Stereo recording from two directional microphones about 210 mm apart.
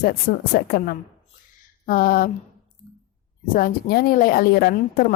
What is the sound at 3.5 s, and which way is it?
A woman's voice, 45° left (ahead or behind).